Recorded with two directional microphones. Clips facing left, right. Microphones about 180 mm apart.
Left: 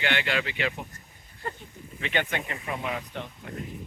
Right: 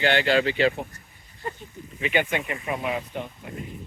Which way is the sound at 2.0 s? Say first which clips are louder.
Right 4 dB; 10° right (ahead or behind).